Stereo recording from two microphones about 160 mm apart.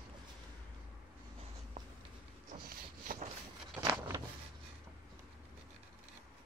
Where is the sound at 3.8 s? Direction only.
20° right (ahead or behind).